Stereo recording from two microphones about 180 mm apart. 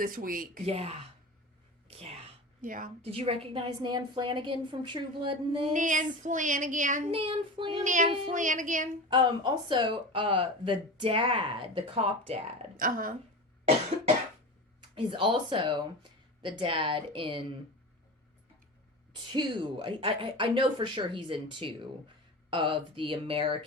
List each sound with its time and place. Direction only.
0.0 s speech: 50° right (ahead or behind)
0.6 s speech: 35° right (ahead or behind)
1.9 s a sound: 35° right (ahead or behind)
2.6 s speech: 50° right (ahead or behind)
3.0 s speech: 35° right (ahead or behind)
5.7 s speech: 45° right (ahead or behind)
7.1 s speech: 30° right (ahead or behind)
7.9 s speech: 45° right (ahead or behind)
9.0 s speech: 25° right (ahead or behind)
12.7 s speech: 50° right (ahead or behind)
14.8 s speech: 25° right (ahead or behind)
19.1 s speech: 25° right (ahead or behind)